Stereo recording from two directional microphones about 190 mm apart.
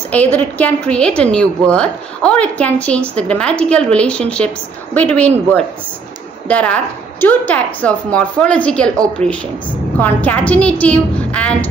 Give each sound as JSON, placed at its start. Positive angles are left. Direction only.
{"t": 0.1, "sound": "a woman's voice", "side_deg": 10}
{"t": 6.4, "sound": "a woman's voice", "side_deg": 5}
{"t": 9.2, "sound": "speech", "side_deg": -35}
{"t": 9.9, "sound": "a woman's voice", "side_deg": 10}